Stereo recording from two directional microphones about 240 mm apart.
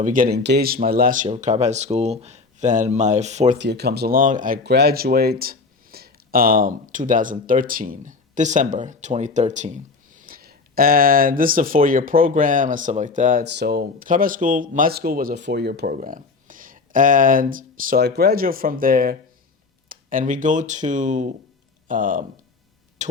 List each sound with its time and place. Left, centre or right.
0.0 s speech: right
3.6 s speech: right
23.0 s a sound: right